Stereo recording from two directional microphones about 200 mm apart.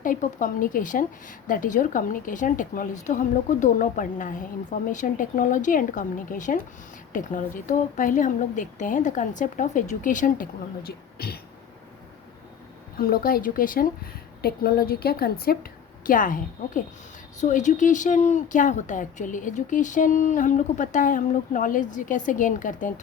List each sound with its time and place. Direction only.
0.0 s speech: 40° left (ahead or behind)
13.0 s a woman's voice: 45° left (ahead or behind)